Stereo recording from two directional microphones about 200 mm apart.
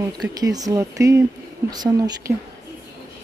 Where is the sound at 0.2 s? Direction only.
20° right (ahead or behind).